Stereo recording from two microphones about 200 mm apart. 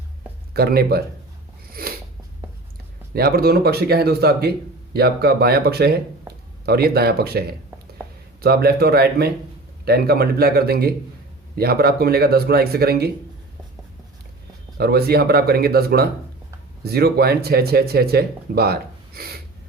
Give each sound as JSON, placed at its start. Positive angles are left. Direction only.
{"t": 0.5, "sound": "speech", "side_deg": -50}
{"t": 1.7, "sound": "a sound", "side_deg": -50}
{"t": 3.2, "sound": "speech", "side_deg": -50}
{"t": 14.8, "sound": "speech", "side_deg": -50}